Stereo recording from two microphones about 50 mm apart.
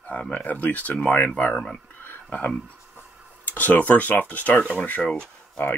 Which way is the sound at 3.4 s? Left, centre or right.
Left.